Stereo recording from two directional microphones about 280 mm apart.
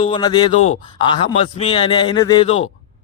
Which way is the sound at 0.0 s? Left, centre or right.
Centre.